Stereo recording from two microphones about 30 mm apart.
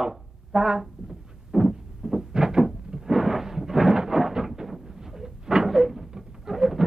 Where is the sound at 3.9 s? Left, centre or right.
Centre.